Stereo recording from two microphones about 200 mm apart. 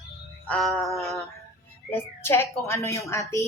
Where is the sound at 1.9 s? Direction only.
10° left (ahead or behind).